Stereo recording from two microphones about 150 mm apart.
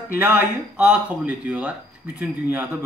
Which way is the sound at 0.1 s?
15° right (ahead or behind).